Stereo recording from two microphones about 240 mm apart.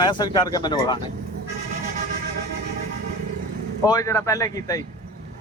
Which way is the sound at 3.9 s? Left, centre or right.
Centre.